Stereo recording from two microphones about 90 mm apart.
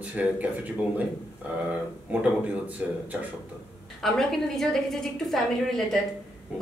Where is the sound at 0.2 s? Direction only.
10° right (ahead or behind).